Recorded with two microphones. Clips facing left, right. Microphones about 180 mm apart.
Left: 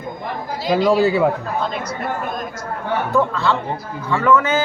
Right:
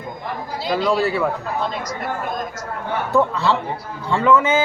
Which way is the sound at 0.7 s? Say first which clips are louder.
Left 4 dB; 10° left (ahead or behind).